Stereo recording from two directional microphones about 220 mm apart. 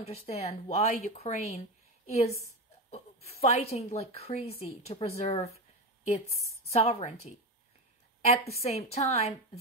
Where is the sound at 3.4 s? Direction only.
30° left (ahead or behind).